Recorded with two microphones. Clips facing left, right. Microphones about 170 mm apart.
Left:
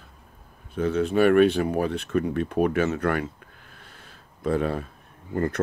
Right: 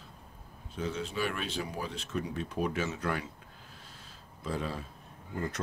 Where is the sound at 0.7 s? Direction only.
60° left (ahead or behind).